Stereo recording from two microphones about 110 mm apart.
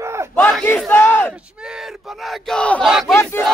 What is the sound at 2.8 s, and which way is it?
Battle cry, centre (ahead or behind).